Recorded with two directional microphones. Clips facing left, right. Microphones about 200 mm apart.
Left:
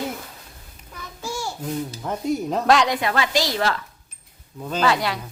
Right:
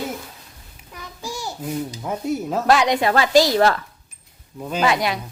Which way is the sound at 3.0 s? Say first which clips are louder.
Right 7 dB; 35° right (ahead or behind).